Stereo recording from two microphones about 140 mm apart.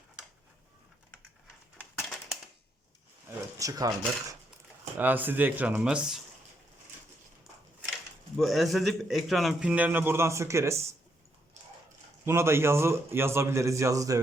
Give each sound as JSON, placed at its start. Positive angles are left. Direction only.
{"t": 1.8, "sound": "a sound", "side_deg": 0}
{"t": 3.2, "sound": "speech", "side_deg": -25}
{"t": 4.9, "sound": "a man's voice", "side_deg": -10}
{"t": 8.4, "sound": "a man's voice", "side_deg": 0}
{"t": 12.2, "sound": "a man's voice", "side_deg": -20}